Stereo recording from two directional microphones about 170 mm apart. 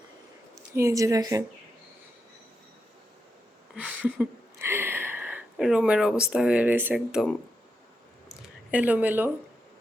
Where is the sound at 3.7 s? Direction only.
10° right (ahead or behind).